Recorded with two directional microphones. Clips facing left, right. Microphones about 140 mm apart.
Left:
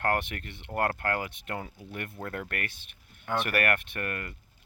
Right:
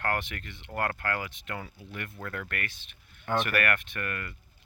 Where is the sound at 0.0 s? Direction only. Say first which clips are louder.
Left 3 dB; 50° left (ahead or behind).